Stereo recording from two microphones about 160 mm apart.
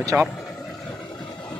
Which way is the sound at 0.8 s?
5° left (ahead or behind).